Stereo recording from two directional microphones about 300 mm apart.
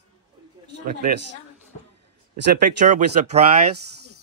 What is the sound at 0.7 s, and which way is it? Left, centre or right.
Speech, right.